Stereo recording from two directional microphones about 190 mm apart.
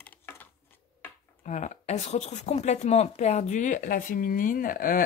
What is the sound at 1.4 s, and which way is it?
Speech, 40° left (ahead or behind).